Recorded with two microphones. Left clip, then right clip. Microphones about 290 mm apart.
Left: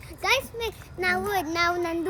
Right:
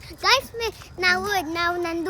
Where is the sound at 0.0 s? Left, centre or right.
Right.